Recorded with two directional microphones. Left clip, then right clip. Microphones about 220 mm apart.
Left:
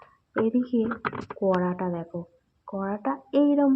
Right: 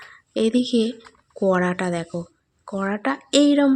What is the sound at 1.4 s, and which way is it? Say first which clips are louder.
Speech: right 5 dB; 35° right (ahead or behind).